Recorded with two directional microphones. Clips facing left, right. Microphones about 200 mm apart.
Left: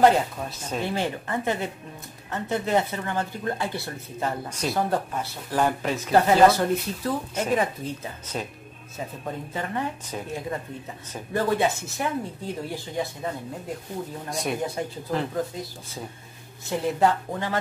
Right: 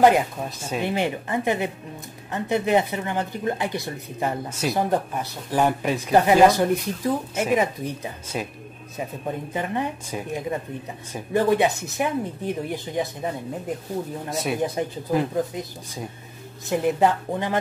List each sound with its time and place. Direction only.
0.0 s speech: 15° right (ahead or behind)
9.5 s speech: 15° right (ahead or behind)
14.3 s speech: 5° right (ahead or behind)
14.6 s speech: 15° right (ahead or behind)